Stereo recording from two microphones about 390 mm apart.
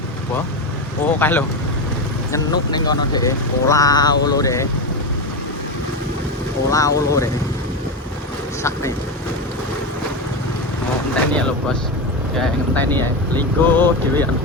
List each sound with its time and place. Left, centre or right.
1.0 s speech: centre
6.7 s speech: centre
11.1 s speech: centre